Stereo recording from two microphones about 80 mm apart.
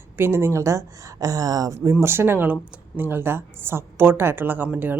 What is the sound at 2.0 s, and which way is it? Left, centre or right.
Speech, right.